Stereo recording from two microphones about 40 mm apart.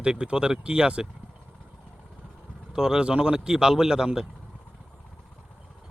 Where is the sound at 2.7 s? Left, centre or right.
Centre.